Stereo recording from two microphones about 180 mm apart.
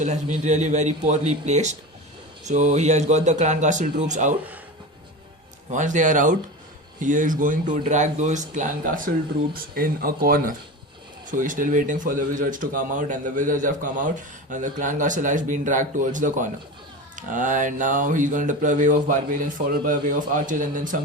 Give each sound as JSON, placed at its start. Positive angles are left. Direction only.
{"t": 0.0, "sound": "a man's voice", "side_deg": -40}
{"t": 5.7, "sound": "speech", "side_deg": -45}